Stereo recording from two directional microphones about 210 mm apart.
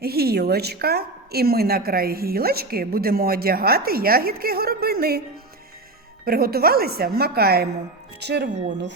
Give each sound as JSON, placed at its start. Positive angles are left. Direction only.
{"t": 0.0, "sound": "a woman's voice", "side_deg": -45}
{"t": 6.2, "sound": "a woman's voice", "side_deg": -45}